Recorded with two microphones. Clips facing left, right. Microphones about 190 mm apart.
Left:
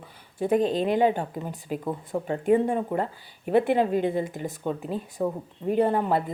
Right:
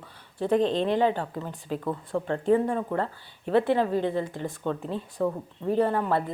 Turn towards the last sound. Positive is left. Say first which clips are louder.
# left 2 dB
turn(degrees=15)  # may be behind; listen again after turning